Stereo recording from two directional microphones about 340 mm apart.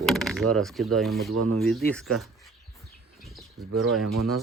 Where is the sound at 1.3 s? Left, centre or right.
Right.